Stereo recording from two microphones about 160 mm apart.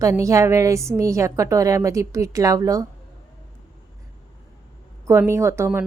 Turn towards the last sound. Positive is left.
turn(degrees=-15)  # may be behind; listen again after turning